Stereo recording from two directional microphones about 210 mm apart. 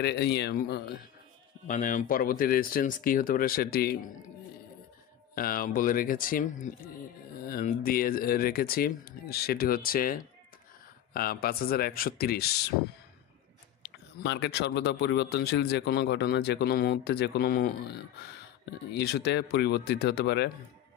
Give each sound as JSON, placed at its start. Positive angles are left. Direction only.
{"t": 0.0, "sound": "speech", "side_deg": 50}
{"t": 1.7, "sound": "speech", "side_deg": 40}
{"t": 5.3, "sound": "speech", "side_deg": 45}
{"t": 11.1, "sound": "speech", "side_deg": 45}
{"t": 13.8, "sound": "speech", "side_deg": 55}
{"t": 18.9, "sound": "speech", "side_deg": 55}